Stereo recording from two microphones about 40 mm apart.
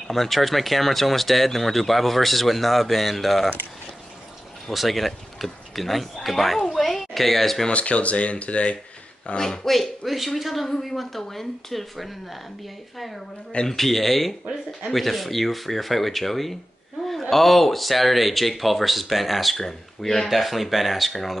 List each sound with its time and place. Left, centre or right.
0.1 s speech: centre
4.6 s speech: centre
6.7 s a sound: centre
7.7 s speech: left
9.7 s speech: centre
13.7 s speech: centre
20.2 s speech: centre